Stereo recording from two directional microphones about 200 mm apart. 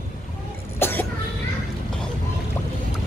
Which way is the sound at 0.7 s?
10° left (ahead or behind).